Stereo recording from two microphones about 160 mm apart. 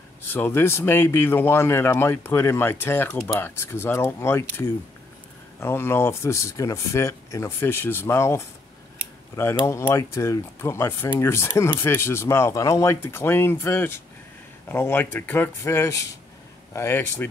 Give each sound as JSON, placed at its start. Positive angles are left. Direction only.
{"t": 0.2, "sound": "speech", "side_deg": 10}
{"t": 9.7, "sound": "speech", "side_deg": 15}